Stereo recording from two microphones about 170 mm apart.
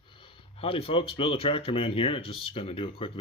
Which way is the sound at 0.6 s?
35° left (ahead or behind).